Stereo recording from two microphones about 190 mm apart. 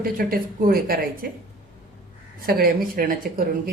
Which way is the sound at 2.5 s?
55° right (ahead or behind).